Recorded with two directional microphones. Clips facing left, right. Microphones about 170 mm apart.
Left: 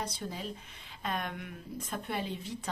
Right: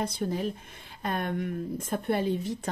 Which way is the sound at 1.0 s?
40° right (ahead or behind).